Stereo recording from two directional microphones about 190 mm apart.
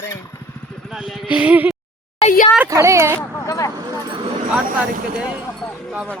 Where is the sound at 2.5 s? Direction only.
10° right (ahead or behind).